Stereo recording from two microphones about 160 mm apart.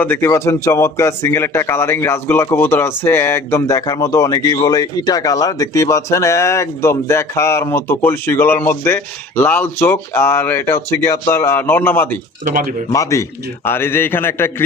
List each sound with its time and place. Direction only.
0.0 s speech: 10° left (ahead or behind)
12.5 s speech: 60° right (ahead or behind)
12.9 s a man's voice: 20° left (ahead or behind)